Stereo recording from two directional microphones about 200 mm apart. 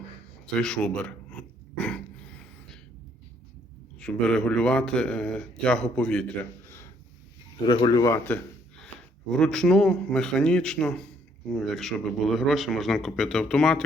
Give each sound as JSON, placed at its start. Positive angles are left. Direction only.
{"t": 0.4, "sound": "a sound", "side_deg": 5}
{"t": 4.0, "sound": "a man's voice", "side_deg": 5}
{"t": 7.7, "sound": "a man's voice", "side_deg": 20}